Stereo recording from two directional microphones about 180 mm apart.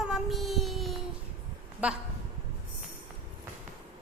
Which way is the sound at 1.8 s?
5° right (ahead or behind).